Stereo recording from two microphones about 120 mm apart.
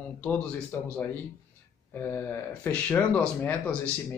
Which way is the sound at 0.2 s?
15° left (ahead or behind).